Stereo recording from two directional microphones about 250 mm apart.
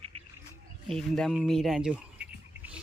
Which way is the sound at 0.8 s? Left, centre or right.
Centre.